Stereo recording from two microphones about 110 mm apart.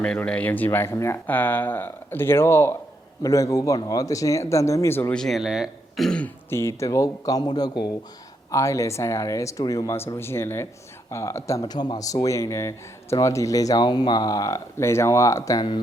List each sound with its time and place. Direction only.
0.3 s speech: 15° left (ahead or behind)
5.1 s speech: centre (ahead or behind)
6.1 s speech: 10° left (ahead or behind)
6.5 s speech: 25° left (ahead or behind)